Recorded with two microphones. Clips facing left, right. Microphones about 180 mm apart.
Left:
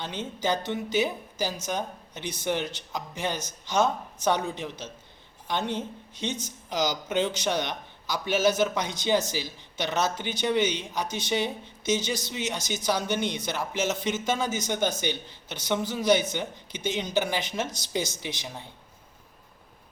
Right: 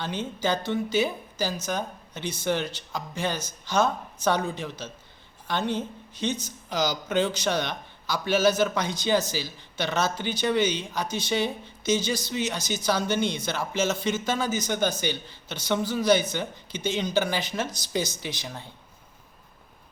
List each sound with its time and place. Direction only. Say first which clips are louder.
0.0 s speech: right 2 dB; 20° left (ahead or behind)